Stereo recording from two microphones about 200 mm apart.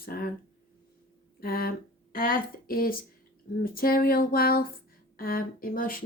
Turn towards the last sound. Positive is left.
turn(degrees=45)  # may be behind; listen again after turning